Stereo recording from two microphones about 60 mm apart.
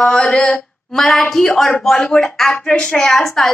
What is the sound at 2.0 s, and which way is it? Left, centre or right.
Speech, centre.